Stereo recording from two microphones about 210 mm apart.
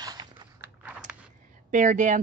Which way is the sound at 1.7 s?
35° right (ahead or behind).